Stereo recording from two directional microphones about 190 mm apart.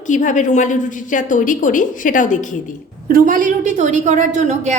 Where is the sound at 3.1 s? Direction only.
45° right (ahead or behind).